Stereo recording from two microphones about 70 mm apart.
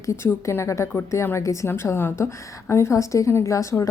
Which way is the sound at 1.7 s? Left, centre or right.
Left.